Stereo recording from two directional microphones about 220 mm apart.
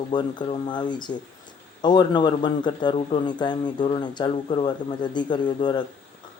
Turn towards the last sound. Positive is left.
turn(degrees=20)  # may be behind; listen again after turning